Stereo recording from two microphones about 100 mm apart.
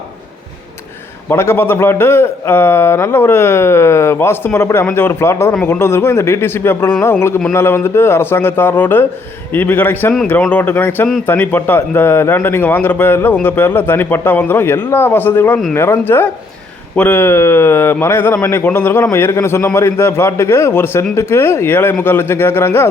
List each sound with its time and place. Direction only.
1.3 s a man's voice: 25° left (ahead or behind)